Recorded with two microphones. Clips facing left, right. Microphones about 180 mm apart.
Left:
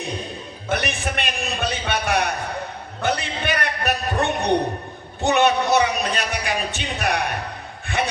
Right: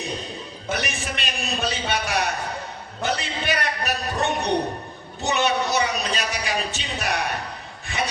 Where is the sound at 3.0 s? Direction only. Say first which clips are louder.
Left 3 dB; 55° left (ahead or behind).